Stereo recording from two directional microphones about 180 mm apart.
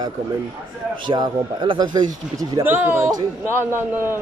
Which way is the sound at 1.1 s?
25° right (ahead or behind).